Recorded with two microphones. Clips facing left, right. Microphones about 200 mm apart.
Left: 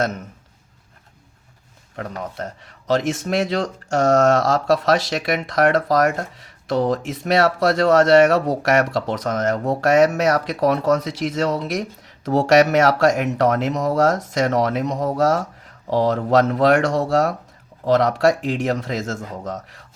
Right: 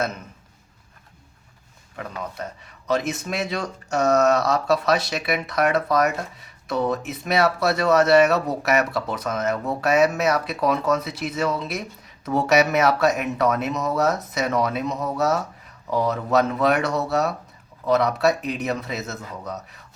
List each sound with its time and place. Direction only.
2.0 s speech: 40° left (ahead or behind)
2.4 s speech: 75° left (ahead or behind)
15.2 s speech: 90° left